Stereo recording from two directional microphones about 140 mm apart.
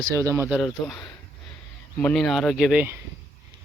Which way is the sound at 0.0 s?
20° right (ahead or behind).